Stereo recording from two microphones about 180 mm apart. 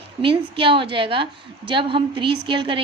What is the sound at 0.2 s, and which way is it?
A woman's voice, 30° right (ahead or behind).